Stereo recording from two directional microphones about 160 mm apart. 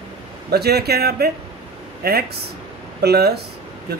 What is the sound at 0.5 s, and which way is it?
Speech, 85° right.